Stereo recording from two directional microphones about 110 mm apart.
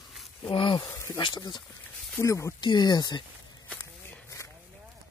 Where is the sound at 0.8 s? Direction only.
25° left (ahead or behind).